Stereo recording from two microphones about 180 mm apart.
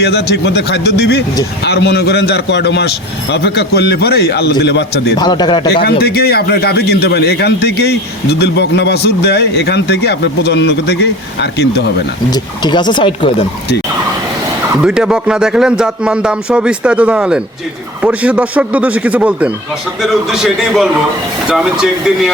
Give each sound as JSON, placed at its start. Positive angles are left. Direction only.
{"t": 0.0, "sound": "a man's voice", "side_deg": 65}
{"t": 5.1, "sound": "speech", "side_deg": 25}
{"t": 5.7, "sound": "a man's voice", "side_deg": 60}
{"t": 12.3, "sound": "speech", "side_deg": 25}
{"t": 14.8, "sound": "speech", "side_deg": -5}